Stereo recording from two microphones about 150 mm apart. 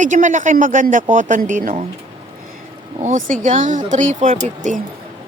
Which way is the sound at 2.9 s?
55° right (ahead or behind).